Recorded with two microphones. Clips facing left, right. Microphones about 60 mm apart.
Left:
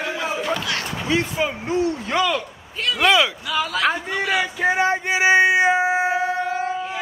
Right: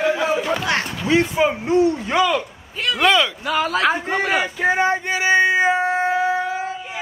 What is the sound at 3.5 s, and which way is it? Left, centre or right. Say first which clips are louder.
A man's voice: right 3 dB; right.